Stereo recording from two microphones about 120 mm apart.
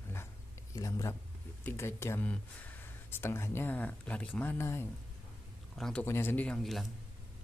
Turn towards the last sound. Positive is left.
turn(degrees=0)  # may be behind; listen again after turning